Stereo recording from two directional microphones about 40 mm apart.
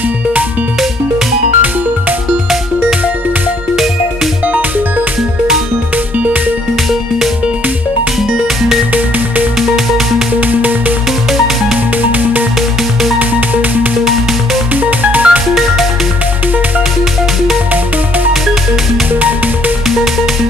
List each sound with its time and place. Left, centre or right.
4.5 s music: right
8.2 s music: centre
10.4 s music: right
12.0 s music: right
14.8 s music: right
15.5 s music: centre
19.1 s music: right